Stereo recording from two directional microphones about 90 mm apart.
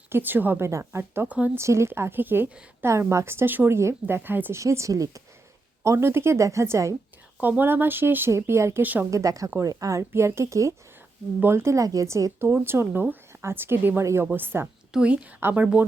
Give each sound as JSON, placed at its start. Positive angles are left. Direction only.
{"t": 0.1, "sound": "a woman's voice", "side_deg": -20}
{"t": 4.6, "sound": "speech", "side_deg": -35}
{"t": 7.3, "sound": "a woman's voice", "side_deg": -20}
{"t": 9.0, "sound": "a woman's voice", "side_deg": -40}
{"t": 15.4, "sound": "a woman's voice", "side_deg": -25}